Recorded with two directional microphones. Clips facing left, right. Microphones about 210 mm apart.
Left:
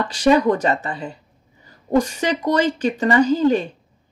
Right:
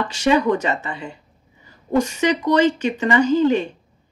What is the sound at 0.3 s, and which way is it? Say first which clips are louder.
Speech: left 2 dB; 40° left (ahead or behind).